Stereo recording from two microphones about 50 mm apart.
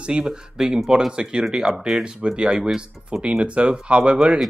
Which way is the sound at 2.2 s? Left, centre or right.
Centre.